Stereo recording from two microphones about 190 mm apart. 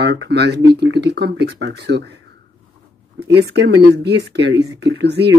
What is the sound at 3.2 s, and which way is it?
Speech, 60° right (ahead or behind).